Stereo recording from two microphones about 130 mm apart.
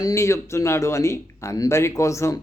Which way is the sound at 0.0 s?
20° left (ahead or behind).